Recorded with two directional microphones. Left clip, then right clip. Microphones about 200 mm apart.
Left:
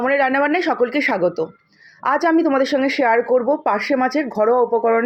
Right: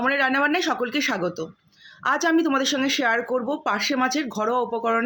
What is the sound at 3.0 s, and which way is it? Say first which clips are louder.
A woman's voice: left 7 dB; 5° left (ahead or behind).